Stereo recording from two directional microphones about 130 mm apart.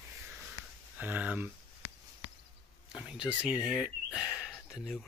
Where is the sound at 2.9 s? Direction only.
5° right (ahead or behind).